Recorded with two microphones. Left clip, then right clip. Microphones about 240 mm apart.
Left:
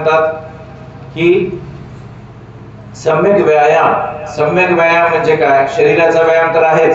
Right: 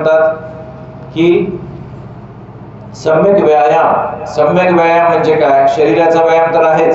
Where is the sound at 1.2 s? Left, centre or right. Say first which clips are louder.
Right 1 dB; centre.